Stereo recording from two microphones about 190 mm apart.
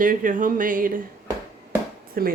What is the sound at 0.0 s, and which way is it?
Speech, 45° right (ahead or behind).